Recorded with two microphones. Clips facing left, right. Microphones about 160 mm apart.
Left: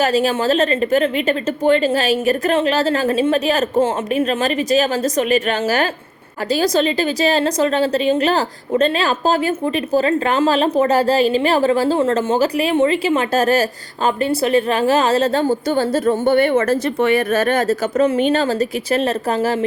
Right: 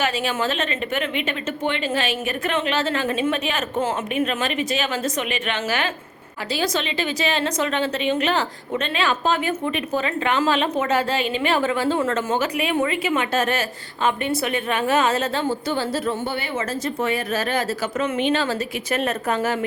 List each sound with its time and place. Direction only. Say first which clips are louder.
0.0 s a woman's voice: left 7 dB; 40° left (ahead or behind)